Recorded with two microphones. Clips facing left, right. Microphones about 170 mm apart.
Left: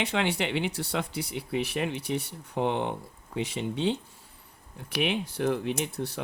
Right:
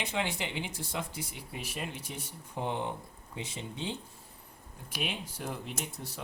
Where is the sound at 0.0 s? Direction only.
70° left (ahead or behind).